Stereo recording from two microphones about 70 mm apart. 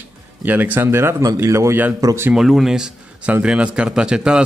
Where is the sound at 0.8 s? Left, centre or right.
Right.